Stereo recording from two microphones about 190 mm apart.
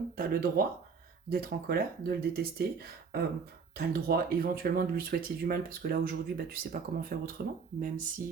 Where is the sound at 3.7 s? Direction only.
55° right (ahead or behind).